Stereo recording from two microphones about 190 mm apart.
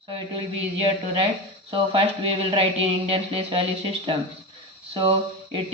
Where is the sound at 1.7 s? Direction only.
30° right (ahead or behind).